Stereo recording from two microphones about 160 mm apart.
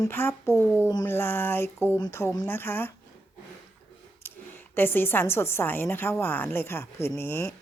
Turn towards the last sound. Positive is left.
turn(degrees=15)  # may be behind; listen again after turning